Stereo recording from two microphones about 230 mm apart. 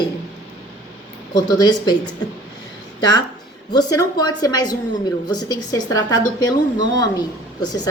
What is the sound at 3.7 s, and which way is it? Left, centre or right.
A woman's voice, centre.